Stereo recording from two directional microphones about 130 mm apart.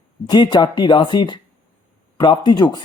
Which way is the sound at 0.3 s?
35° left (ahead or behind).